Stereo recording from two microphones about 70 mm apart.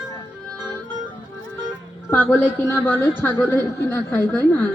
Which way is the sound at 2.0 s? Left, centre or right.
Left.